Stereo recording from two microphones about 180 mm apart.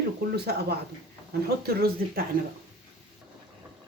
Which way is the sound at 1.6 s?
60° right (ahead or behind).